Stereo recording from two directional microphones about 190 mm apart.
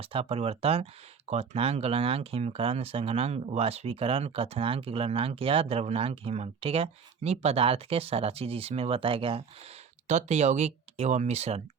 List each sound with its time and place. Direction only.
0.0 s speech: 30° right (ahead or behind)